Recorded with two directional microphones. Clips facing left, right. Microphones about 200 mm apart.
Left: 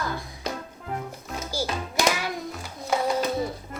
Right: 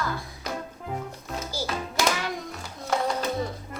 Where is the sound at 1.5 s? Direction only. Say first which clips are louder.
Left 3 dB; 10° left (ahead or behind).